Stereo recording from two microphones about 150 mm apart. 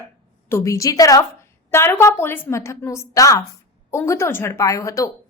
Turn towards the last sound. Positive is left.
turn(degrees=20)  # may be behind; listen again after turning